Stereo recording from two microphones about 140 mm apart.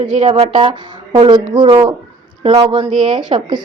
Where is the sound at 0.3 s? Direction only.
40° right (ahead or behind).